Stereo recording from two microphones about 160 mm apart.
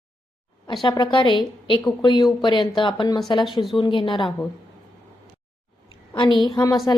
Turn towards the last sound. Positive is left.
turn(degrees=20)  # may be behind; listen again after turning